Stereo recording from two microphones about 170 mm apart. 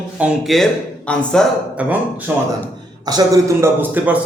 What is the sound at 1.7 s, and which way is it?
Speech, 10° right (ahead or behind).